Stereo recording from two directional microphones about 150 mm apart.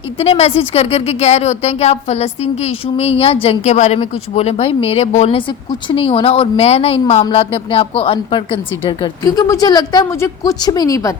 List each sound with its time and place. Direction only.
0.2 s a woman's voice: 45° left (ahead or behind); by 11.1 s 20° left (ahead or behind)